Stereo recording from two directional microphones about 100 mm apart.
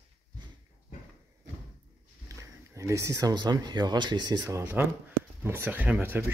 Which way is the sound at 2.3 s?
30° right (ahead or behind).